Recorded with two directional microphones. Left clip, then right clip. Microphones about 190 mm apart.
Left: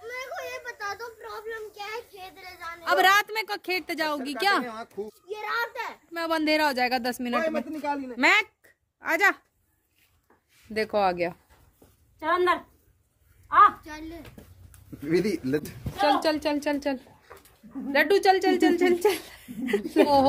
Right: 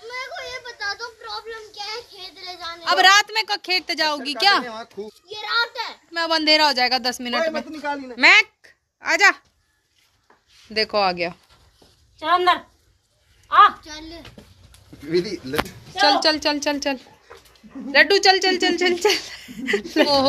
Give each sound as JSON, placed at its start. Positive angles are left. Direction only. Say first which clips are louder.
{"t": 0.2, "sound": "a sound", "louder": "right 4 dB", "side_deg": 10}
{"t": 4.6, "sound": "a woman's voice", "louder": "right 3 dB", "side_deg": -25}
{"t": 5.3, "sound": "a child's voice", "louder": "right 7 dB", "side_deg": 10}
{"t": 7.8, "sound": "a woman's voice", "louder": "right 3 dB", "side_deg": -20}
{"t": 8.2, "sound": "a child's voice", "louder": "right 8 dB", "side_deg": 10}
{"t": 10.7, "sound": "a child's voice", "louder": "right 4 dB", "side_deg": 10}
{"t": 12.2, "sound": "a woman's voice", "louder": "right 6 dB", "side_deg": -40}
{"t": 13.8, "sound": "a child's voice", "louder": "right 3 dB", "side_deg": 10}
{"t": 15.0, "sound": "speech", "louder": "right 2 dB", "side_deg": 70}
{"t": 16.0, "sound": "a woman's voice", "louder": "right 6 dB", "side_deg": 5}